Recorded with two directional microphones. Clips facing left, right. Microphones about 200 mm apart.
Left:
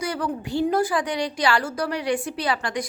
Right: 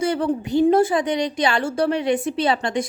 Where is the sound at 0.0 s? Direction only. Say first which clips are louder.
Right 6 dB; 25° right (ahead or behind).